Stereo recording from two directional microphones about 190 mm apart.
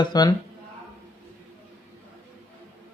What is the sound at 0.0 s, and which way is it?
Speech, 20° left (ahead or behind).